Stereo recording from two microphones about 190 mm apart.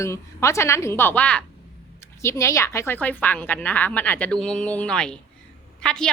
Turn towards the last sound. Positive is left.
turn(degrees=5)  # may be behind; listen again after turning